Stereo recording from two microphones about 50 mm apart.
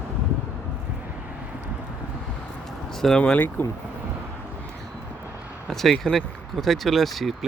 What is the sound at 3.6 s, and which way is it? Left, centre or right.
Speech, left.